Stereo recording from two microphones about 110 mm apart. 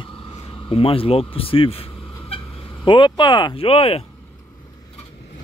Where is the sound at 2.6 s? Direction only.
50° left (ahead or behind).